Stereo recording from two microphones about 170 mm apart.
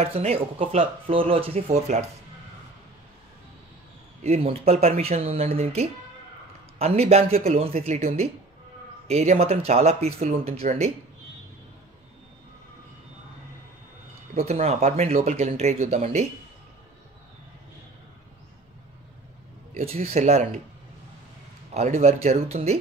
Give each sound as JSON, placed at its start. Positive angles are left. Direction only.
{"t": 0.0, "sound": "speech", "side_deg": -35}
{"t": 4.2, "sound": "speech", "side_deg": -35}
{"t": 14.3, "sound": "speech", "side_deg": -40}
{"t": 19.8, "sound": "speech", "side_deg": -35}
{"t": 21.7, "sound": "speech", "side_deg": -40}